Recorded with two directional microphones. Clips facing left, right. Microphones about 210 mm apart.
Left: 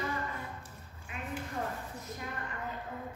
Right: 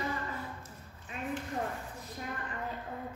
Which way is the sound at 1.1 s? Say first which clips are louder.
Right 2 dB; 35° right (ahead or behind).